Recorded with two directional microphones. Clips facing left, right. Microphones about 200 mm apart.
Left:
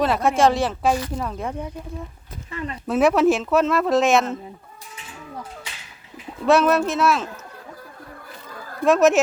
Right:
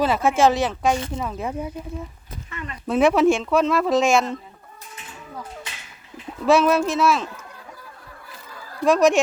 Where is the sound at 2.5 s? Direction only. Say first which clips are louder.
Left 5 dB; 35° left (ahead or behind).